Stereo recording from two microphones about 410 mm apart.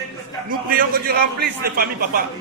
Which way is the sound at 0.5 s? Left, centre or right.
Right.